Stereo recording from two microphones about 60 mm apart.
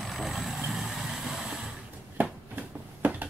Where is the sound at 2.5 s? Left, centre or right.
Right.